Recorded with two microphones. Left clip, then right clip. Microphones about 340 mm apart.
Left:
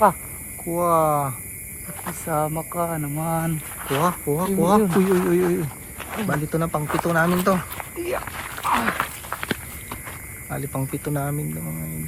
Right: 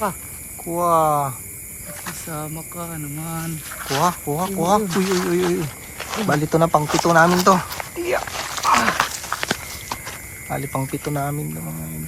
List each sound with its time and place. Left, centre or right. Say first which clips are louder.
0.7 s speech: right 2 dB; centre
2.4 s speech: left 7 dB; centre
3.8 s speech: right 2 dB; centre
8.0 s a sound: right 4 dB; right
8.9 s horse: right 5 dB; centre
10.5 s speech: right 4 dB; centre